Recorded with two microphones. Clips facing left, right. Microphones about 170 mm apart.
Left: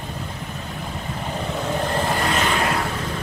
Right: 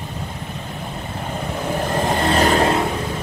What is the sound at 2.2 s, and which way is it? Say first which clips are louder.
Vehicle: right 6 dB; 35° right (ahead or behind).